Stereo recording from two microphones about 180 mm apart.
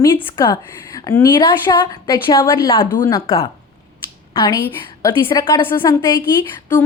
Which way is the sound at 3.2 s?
30° left (ahead or behind).